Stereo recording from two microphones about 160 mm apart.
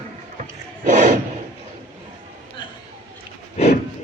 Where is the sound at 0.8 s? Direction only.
55° right (ahead or behind).